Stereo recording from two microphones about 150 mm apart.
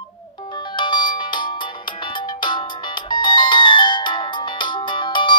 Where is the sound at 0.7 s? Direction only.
30° left (ahead or behind).